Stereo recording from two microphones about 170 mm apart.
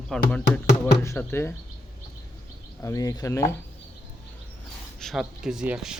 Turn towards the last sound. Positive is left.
turn(degrees=-5)  # may be behind; listen again after turning